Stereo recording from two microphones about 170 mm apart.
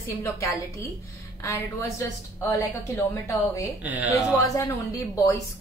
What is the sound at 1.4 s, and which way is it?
Speech, 15° left (ahead or behind).